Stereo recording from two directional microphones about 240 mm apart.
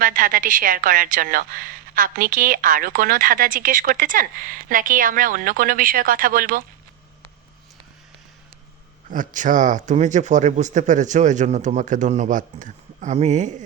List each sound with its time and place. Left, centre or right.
0.0 s a woman's voice: right
9.0 s a woman's voice: right